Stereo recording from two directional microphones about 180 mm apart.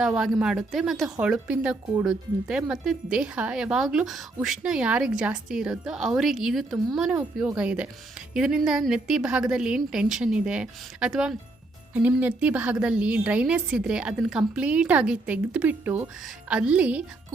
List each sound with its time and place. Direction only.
0.0 s a woman's voice: centre (ahead or behind)